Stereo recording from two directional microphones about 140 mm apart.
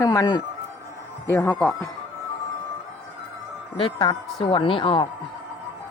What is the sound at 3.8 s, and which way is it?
A woman's voice, 35° left (ahead or behind).